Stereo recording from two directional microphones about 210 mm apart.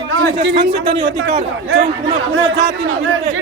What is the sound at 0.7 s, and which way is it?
Speech, 35° right (ahead or behind).